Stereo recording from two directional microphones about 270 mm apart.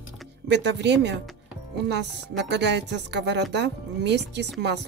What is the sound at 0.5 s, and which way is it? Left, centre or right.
Speech, right.